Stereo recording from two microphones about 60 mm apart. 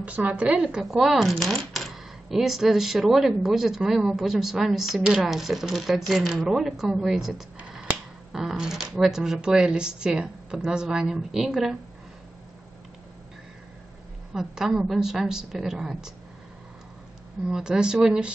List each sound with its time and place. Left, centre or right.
0.0 s a woman's voice: right; by 11.7 s centre
14.3 s speech: centre
17.5 s speech: centre